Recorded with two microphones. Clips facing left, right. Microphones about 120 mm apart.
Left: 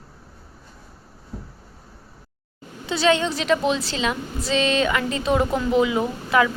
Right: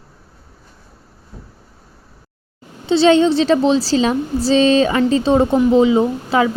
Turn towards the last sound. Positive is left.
turn(degrees=-25)  # may be behind; listen again after turning